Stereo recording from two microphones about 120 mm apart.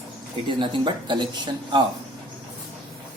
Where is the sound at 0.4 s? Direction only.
45° right (ahead or behind).